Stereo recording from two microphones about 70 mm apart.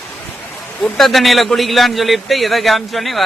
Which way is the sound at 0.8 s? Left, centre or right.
Centre.